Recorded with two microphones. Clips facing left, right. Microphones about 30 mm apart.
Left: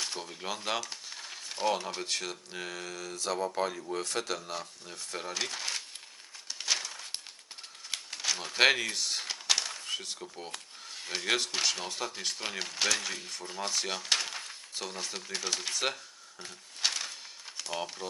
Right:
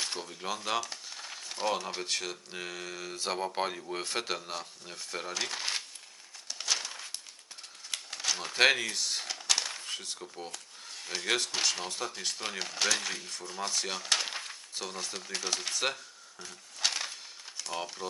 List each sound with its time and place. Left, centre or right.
0.2 s speech: centre
3.2 s a man's voice: right; by 5.5 s centre
5.5 s speech: centre
6.5 s crumpling: centre
8.1 s crumpling: centre
9.6 s a sound: centre
10.9 s speech: centre
13.5 s speech: centre
16.8 s a sound: centre
17.8 s speech: centre